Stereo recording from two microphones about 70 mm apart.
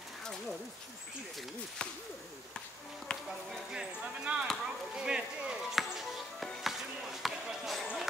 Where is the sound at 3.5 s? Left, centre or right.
Centre.